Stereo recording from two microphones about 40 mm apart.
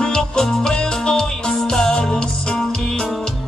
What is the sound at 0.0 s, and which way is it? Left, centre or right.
Music, centre.